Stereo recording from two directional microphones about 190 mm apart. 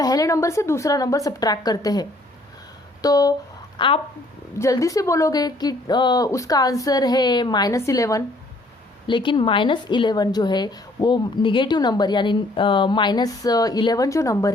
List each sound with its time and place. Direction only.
0.0 s speech: 20° left (ahead or behind)
4.5 s speech: 15° left (ahead or behind)